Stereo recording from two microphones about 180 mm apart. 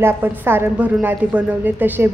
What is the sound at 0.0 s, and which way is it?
A woman's voice, 10° right (ahead or behind).